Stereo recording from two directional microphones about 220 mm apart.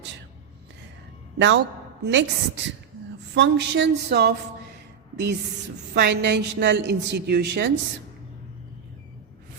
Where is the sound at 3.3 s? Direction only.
50° right (ahead or behind).